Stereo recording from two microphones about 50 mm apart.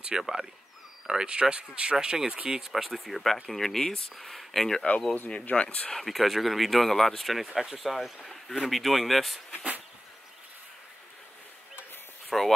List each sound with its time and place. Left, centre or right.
0.1 s speech: centre
2.6 s speech: centre
5.3 s speech: left
5.9 s speech: centre
7.4 s speech: centre
12.3 s speech: centre